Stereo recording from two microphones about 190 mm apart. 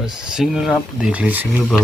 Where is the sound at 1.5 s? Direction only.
Centre (ahead or behind).